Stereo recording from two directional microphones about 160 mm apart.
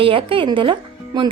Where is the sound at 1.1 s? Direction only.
25° right (ahead or behind).